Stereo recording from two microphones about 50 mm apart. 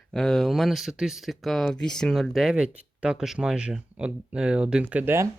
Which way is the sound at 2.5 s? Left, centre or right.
Right.